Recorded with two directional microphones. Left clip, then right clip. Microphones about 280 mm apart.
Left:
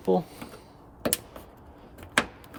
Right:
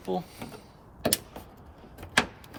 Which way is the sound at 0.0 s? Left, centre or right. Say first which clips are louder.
Left 7 dB; left.